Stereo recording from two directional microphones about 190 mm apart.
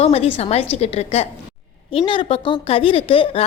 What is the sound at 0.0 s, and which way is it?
A woman's voice, 35° left (ahead or behind).